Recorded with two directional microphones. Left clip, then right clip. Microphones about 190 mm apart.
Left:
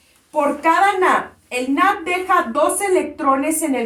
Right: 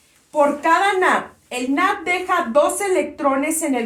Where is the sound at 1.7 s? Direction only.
30° right (ahead or behind).